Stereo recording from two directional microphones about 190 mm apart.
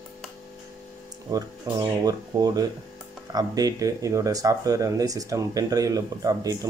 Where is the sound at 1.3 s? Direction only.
20° right (ahead or behind).